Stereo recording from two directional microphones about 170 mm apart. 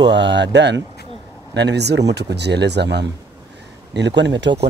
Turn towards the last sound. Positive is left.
turn(degrees=-90)